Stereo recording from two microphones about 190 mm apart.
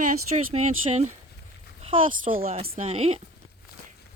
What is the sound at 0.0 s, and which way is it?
Speech, 35° right (ahead or behind).